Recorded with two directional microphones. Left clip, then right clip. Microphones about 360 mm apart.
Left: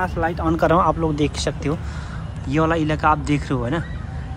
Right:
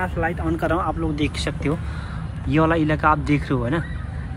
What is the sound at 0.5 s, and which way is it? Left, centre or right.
Speech, centre.